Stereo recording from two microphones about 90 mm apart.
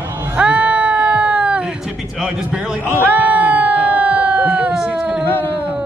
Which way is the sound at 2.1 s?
10° right (ahead or behind).